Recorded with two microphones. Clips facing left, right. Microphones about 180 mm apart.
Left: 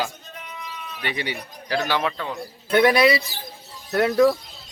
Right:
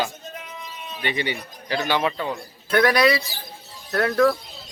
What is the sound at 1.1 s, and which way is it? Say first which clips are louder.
Speech: right 3 dB; 5° left (ahead or behind).